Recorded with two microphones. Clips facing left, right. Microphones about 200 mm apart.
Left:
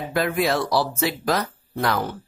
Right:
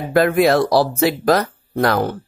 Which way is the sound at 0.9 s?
60° right (ahead or behind).